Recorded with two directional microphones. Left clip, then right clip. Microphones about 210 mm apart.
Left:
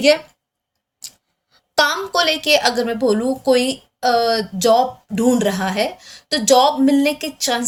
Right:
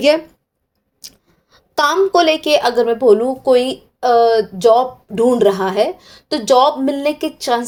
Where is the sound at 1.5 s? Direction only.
35° right (ahead or behind).